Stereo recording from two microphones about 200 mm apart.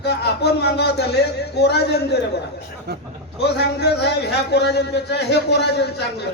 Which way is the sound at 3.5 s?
55° left (ahead or behind).